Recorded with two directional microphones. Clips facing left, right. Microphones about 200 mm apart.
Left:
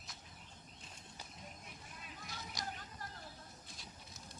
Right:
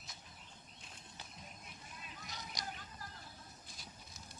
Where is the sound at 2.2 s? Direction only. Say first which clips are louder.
Left 1 dB; 20° right (ahead or behind).